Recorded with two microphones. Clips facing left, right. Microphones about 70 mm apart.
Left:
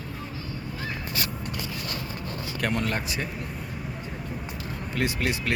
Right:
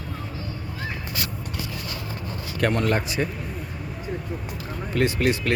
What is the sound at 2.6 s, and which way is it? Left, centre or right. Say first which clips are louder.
Speech: right 6 dB; centre.